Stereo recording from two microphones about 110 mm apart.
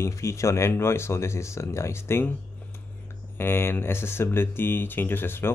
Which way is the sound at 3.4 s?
20° left (ahead or behind).